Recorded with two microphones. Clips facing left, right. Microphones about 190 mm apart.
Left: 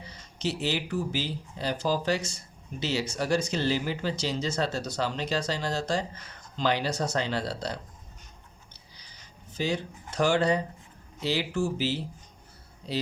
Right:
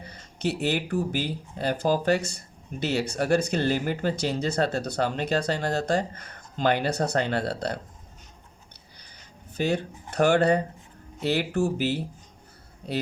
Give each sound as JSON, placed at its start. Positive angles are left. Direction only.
{"t": 0.0, "sound": "speech", "side_deg": -55}
{"t": 9.0, "sound": "a sound", "side_deg": -55}
{"t": 11.2, "sound": "speech", "side_deg": -60}